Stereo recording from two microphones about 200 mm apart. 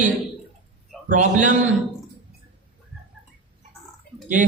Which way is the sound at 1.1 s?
40° right (ahead or behind).